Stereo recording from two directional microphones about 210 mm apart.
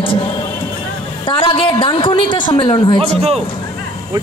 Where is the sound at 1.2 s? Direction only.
25° left (ahead or behind).